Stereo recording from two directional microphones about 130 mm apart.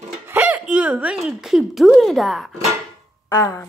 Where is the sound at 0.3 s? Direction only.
15° right (ahead or behind).